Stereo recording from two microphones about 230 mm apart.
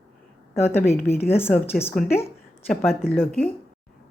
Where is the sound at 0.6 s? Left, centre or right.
Centre.